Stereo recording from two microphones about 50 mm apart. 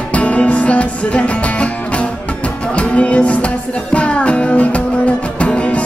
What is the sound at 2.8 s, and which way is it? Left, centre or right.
Music, left.